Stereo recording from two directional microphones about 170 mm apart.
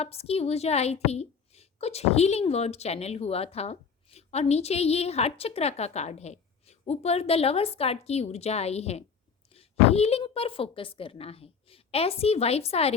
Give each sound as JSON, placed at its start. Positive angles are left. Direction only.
{"t": 0.0, "sound": "a woman's voice", "side_deg": 35}